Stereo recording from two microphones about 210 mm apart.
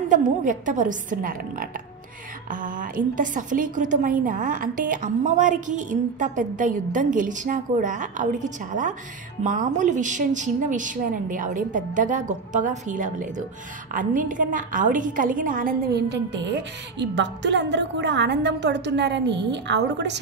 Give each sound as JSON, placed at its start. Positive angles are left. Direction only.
{"t": 0.1, "sound": "a woman's voice", "side_deg": -40}